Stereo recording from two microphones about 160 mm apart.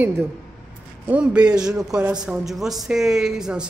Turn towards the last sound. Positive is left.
turn(degrees=-5)  # may be behind; listen again after turning